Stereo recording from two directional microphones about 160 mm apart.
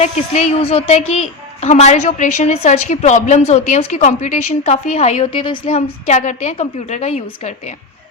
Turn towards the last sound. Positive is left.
turn(degrees=40)  # may be behind; listen again after turning